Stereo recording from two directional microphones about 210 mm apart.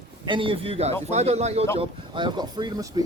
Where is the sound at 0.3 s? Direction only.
25° right (ahead or behind).